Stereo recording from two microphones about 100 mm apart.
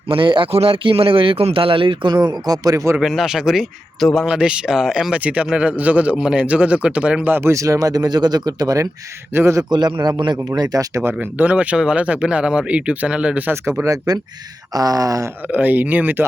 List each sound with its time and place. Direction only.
0.1 s a man's voice: 60° right (ahead or behind); by 2.9 s 35° right (ahead or behind)
3.0 s a man's voice: 5° right (ahead or behind); by 9.6 s 30° right (ahead or behind)
9.6 s a man's voice: 45° right (ahead or behind)
11.0 s speech: 20° right (ahead or behind)
14.1 s a sound: 40° right (ahead or behind)
15.5 s speech: 15° right (ahead or behind)